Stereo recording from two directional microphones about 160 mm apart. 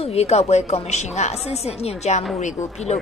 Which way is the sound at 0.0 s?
40° left (ahead or behind).